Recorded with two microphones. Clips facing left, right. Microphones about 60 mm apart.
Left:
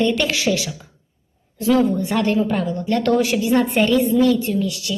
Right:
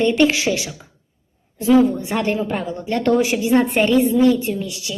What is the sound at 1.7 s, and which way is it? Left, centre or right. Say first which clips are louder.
A woman's voice: right 2 dB; right.